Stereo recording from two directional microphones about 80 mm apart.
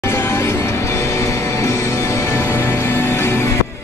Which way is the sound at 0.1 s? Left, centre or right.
Left.